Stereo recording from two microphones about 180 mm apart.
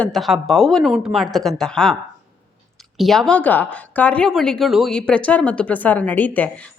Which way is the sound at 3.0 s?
Centre (ahead or behind).